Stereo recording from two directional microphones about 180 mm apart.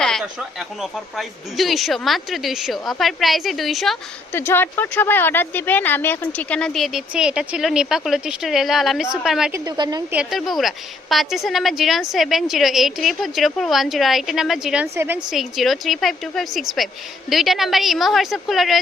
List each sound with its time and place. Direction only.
0.0 s speech: centre (ahead or behind)
4.3 s speech: 10° left (ahead or behind)
9.6 s a woman's voice: 25° right (ahead or behind)
10.1 s speech: 5° right (ahead or behind)